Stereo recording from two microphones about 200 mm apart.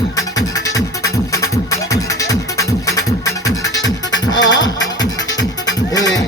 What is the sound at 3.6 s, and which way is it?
Music, 65° left (ahead or behind).